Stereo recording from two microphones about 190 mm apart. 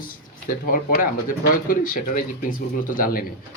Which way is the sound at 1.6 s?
50° left (ahead or behind).